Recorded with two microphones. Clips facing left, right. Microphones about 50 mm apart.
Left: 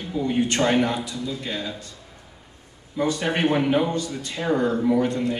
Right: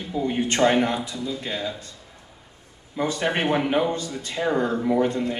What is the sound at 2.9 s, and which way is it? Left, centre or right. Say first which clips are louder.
Speech: left 1 dB; right.